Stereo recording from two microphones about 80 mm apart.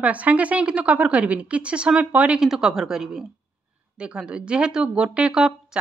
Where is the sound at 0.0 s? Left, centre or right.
Centre.